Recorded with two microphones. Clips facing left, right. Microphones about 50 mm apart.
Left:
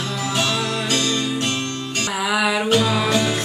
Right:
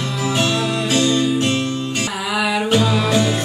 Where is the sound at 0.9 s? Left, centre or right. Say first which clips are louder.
Right 7 dB; centre.